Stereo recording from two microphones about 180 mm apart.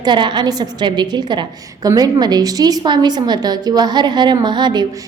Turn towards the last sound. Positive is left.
turn(degrees=-25)  # may be behind; listen again after turning